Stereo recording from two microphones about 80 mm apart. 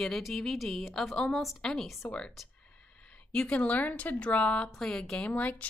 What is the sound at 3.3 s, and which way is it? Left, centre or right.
A woman's voice, centre.